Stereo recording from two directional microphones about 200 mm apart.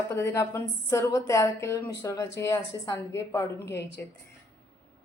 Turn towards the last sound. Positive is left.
turn(degrees=10)  # may be behind; listen again after turning